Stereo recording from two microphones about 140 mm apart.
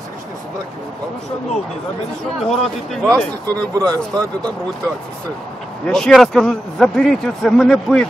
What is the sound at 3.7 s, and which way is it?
Speech, 25° right (ahead or behind).